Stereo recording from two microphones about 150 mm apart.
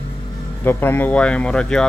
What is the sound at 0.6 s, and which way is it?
Speech, 15° left (ahead or behind).